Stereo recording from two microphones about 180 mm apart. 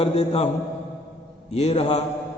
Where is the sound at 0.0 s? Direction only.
35° left (ahead or behind).